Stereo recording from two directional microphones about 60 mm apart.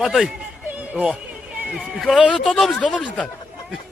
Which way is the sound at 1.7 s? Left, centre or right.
Centre.